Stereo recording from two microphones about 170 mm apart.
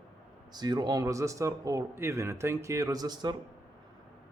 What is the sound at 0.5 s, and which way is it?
Speech, 25° right (ahead or behind).